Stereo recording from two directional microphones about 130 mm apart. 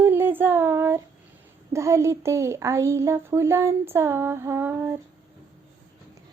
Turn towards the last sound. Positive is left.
turn(degrees=-15)  # may be behind; listen again after turning